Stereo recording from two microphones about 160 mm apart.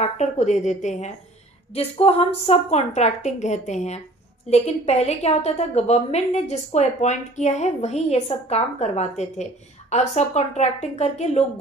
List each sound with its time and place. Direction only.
0.0 s a woman's voice: 45° left (ahead or behind)